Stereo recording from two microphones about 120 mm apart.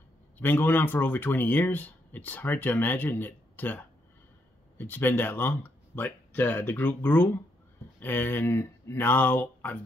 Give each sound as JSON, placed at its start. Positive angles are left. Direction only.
{"t": 0.4, "sound": "speech", "side_deg": 15}